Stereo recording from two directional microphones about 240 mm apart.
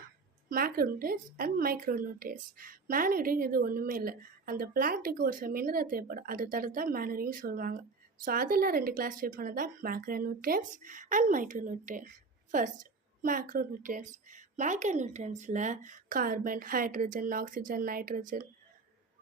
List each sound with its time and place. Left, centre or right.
0.5 s speech: right